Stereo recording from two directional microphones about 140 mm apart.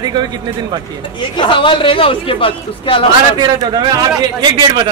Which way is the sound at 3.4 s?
30° right (ahead or behind).